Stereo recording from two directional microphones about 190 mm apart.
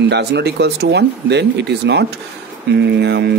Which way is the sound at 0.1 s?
60° right (ahead or behind).